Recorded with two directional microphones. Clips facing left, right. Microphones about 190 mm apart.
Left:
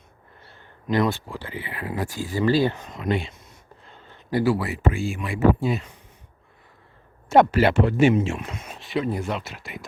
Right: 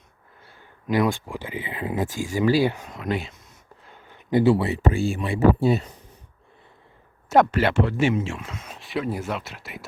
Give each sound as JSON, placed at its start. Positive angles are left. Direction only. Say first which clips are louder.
{"t": 0.9, "sound": "speech", "louder": "even", "side_deg": -10}
{"t": 3.8, "sound": "a sound", "louder": "right 2 dB", "side_deg": -15}
{"t": 4.8, "sound": "speech", "louder": "right 2 dB", "side_deg": -35}
{"t": 7.3, "sound": "speech", "louder": "left 2 dB", "side_deg": 5}